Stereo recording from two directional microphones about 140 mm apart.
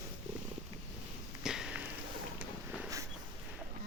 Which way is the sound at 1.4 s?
5° right (ahead or behind).